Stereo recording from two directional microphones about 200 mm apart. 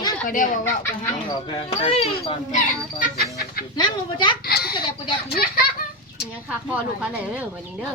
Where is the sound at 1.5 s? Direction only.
30° left (ahead or behind).